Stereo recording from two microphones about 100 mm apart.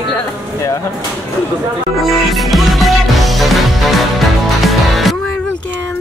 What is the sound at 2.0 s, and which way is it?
Music, centre (ahead or behind).